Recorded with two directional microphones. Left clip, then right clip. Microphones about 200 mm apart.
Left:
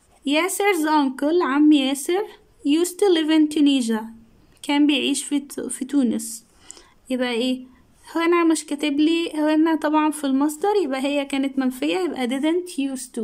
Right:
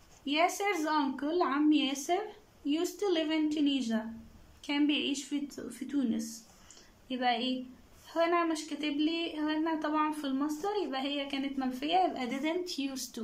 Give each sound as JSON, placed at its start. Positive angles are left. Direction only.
{"t": 0.2, "sound": "speech", "side_deg": 50}